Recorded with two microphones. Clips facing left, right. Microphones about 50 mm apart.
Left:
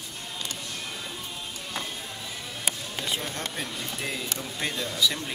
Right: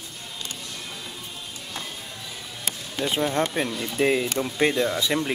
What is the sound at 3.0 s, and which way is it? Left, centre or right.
Speech, right.